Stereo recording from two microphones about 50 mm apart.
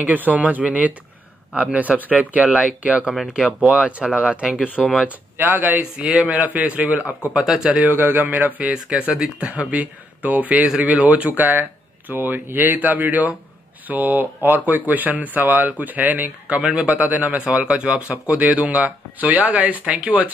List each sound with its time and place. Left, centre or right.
0.0 s speech: right
3.6 s speech: centre
4.8 s speech: centre
5.8 s speech: right
6.4 s speech: right
7.3 s speech: centre
7.9 s speech: right
8.7 s speech: right
16.6 s speech: centre
16.9 s speech: right